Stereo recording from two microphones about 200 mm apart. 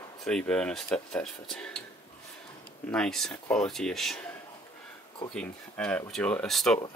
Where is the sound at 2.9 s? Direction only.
5° left (ahead or behind).